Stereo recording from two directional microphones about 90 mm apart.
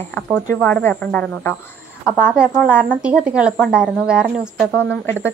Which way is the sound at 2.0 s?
10° right (ahead or behind).